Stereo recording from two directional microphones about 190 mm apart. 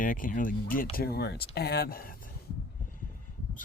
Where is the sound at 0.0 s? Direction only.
45° left (ahead or behind).